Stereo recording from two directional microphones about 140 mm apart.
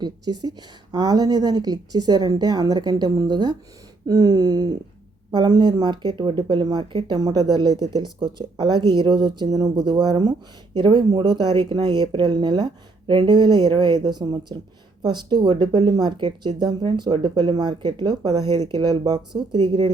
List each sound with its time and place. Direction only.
0.0 s a woman's voice: 30° right (ahead or behind)